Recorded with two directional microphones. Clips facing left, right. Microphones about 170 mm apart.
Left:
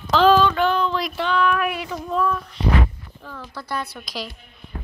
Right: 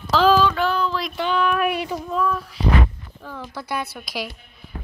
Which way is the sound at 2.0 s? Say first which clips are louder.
Left 1 dB; centre (ahead or behind).